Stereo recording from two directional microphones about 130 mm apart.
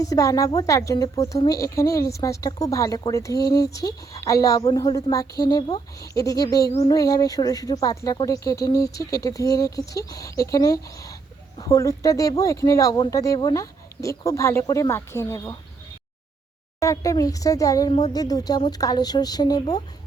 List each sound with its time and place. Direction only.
0.0 s speech: 25° left (ahead or behind)
16.8 s speech: 25° left (ahead or behind)